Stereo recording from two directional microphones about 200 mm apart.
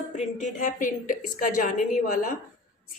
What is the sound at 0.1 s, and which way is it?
A woman's voice, 35° left (ahead or behind).